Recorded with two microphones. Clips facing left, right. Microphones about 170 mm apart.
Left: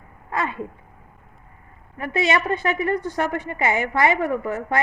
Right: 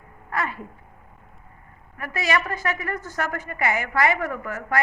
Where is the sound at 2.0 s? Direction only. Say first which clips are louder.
Left 4 dB; 25° left (ahead or behind).